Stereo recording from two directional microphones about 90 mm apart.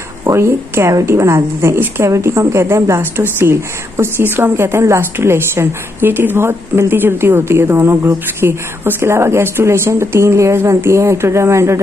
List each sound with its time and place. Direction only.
0.2 s a woman's voice: 30° right (ahead or behind)